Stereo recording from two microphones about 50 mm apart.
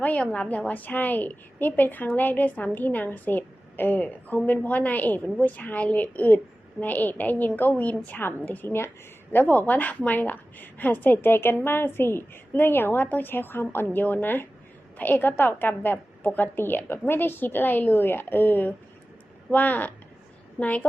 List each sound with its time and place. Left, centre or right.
0.0 s a woman's voice: left